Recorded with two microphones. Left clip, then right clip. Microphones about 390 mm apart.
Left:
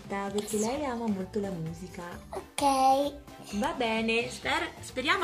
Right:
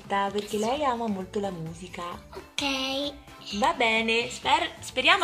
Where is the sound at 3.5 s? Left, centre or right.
Right.